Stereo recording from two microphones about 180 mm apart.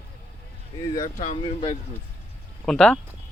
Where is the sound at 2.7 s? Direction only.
Centre (ahead or behind).